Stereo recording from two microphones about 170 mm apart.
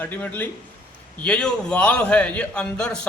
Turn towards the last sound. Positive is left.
turn(degrees=5)  # may be behind; listen again after turning